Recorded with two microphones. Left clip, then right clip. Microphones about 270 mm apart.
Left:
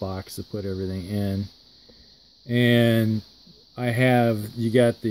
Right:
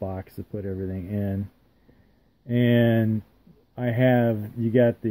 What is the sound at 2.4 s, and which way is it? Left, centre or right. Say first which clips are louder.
Speech: left 2 dB; centre.